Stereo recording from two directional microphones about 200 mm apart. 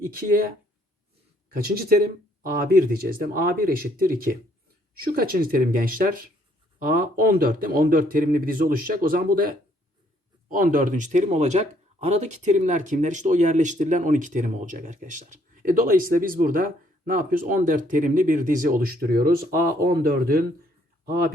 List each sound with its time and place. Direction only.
0.1 s speech: 45° right (ahead or behind)
1.5 s speech: 50° right (ahead or behind)